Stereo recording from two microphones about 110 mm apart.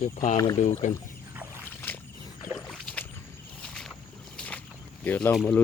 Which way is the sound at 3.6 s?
5° left (ahead or behind).